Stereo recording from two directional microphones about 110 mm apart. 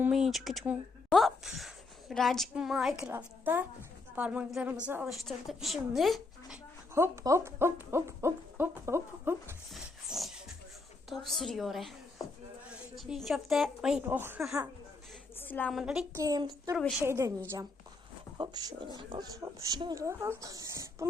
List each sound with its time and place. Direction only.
0.1 s a woman's voice: centre (ahead or behind)
3.1 s speech: 20° right (ahead or behind)
5.0 s a woman's voice: centre (ahead or behind)
6.9 s speech: 25° right (ahead or behind)
10.1 s music: centre (ahead or behind)
11.1 s a woman's voice: centre (ahead or behind)
13.0 s a woman's voice: centre (ahead or behind)
14.0 s speech: 20° right (ahead or behind)
15.4 s a woman's voice: 15° left (ahead or behind)
15.7 s a woman's voice: 5° right (ahead or behind)
16.1 s speech: 35° right (ahead or behind)
18.3 s speech: 40° right (ahead or behind)